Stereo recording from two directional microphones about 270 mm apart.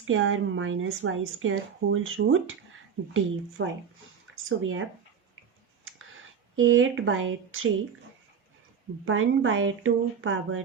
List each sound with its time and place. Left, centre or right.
0.0 s a woman's voice: right
6.6 s a woman's voice: right
9.0 s a woman's voice: right